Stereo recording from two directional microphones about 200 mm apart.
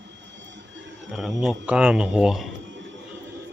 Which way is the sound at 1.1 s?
Centre (ahead or behind).